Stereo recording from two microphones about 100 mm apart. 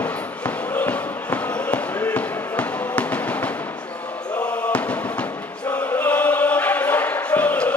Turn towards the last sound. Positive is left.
turn(degrees=15)  # may be behind; listen again after turning